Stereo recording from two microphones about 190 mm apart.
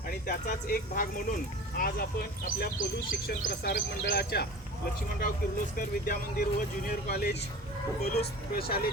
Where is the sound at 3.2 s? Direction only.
50° left (ahead or behind).